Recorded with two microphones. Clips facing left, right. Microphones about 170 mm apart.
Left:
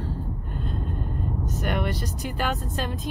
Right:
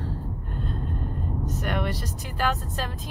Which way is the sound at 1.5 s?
Centre (ahead or behind).